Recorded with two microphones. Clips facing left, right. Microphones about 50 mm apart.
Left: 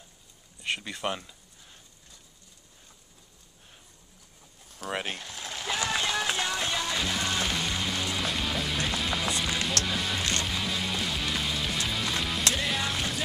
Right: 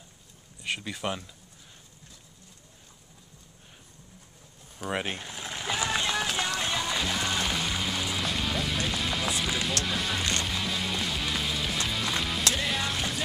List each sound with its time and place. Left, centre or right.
0.6 s speech: centre
4.7 s a sound: centre
5.7 s run: centre
6.6 s music: centre